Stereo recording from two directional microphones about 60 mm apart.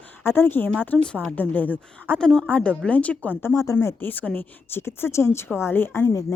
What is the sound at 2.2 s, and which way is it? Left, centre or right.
Speech, centre.